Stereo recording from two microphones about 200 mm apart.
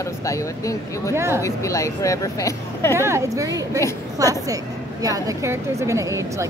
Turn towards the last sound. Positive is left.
turn(degrees=-15)  # may be behind; listen again after turning